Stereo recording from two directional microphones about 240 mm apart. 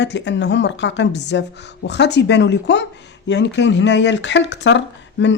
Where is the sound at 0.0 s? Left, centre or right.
Left.